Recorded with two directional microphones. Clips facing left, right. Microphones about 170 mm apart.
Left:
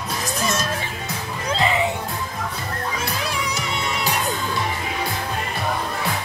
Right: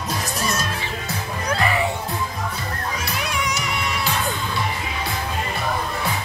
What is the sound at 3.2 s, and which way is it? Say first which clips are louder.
Music: right 1 dB; 35° left (ahead or behind).